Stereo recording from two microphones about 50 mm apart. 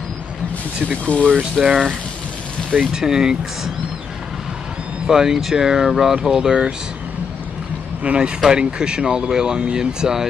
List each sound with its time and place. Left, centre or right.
1.0 s speech: left
1.6 s speech: centre
2.7 s speech: centre
5.0 s speech: centre
8.0 s speech: right
8.4 s speech: centre